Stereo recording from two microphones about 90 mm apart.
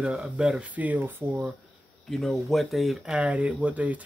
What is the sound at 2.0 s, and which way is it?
Speech, centre (ahead or behind).